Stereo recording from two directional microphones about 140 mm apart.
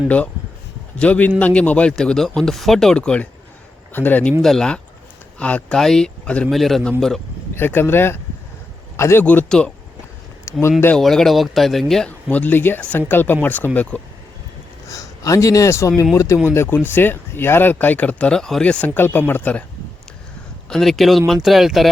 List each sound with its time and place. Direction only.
0.9 s speech: 10° left (ahead or behind)
7.5 s speech: 15° left (ahead or behind)
10.5 s a sound: 20° left (ahead or behind)
10.9 s speech: 5° left (ahead or behind)
14.8 s a man's voice: 25° left (ahead or behind)
20.7 s speech: centre (ahead or behind)